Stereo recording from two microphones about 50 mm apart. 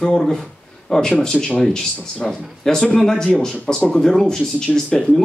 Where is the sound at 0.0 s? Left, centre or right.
Centre.